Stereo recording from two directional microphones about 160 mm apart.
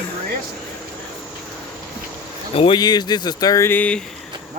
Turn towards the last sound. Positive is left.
turn(degrees=10)  # may be behind; listen again after turning